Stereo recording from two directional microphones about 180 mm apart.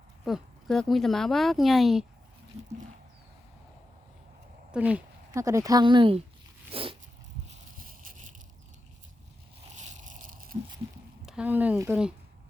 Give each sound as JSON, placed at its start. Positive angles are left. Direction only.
{"t": 0.3, "sound": "speech", "side_deg": 0}
{"t": 4.7, "sound": "speech", "side_deg": -5}
{"t": 6.7, "sound": "dog", "side_deg": -30}
{"t": 7.4, "sound": "a sound", "side_deg": -50}
{"t": 9.7, "sound": "a sound", "side_deg": -40}
{"t": 11.3, "sound": "speech", "side_deg": -5}